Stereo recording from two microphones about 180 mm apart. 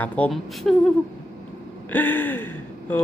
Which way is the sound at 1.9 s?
10° left (ahead or behind).